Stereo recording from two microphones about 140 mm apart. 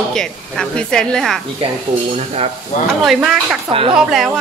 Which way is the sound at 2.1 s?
45° right (ahead or behind).